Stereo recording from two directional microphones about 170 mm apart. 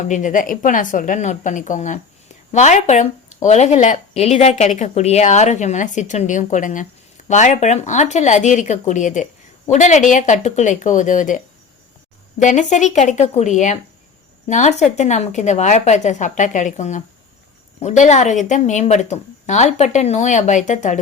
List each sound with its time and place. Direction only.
0.0 s speech: 45° left (ahead or behind)
12.4 s speech: 45° left (ahead or behind)